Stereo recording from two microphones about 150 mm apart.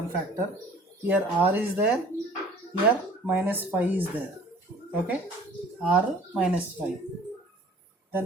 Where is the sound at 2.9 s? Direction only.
10° right (ahead or behind).